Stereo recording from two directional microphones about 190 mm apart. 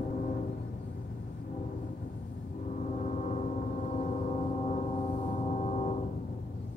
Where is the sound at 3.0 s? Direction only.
40° left (ahead or behind).